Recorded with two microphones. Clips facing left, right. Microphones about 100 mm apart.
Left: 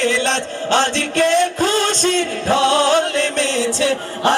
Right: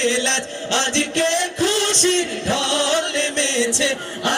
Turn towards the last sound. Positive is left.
turn(degrees=40)  # may be behind; listen again after turning